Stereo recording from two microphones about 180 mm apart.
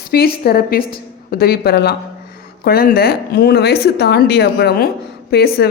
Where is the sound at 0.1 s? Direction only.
60° left (ahead or behind).